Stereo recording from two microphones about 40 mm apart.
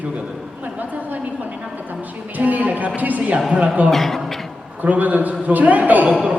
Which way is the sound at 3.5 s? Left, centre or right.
Right.